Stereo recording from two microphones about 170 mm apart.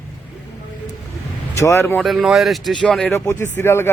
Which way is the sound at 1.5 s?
15° left (ahead or behind).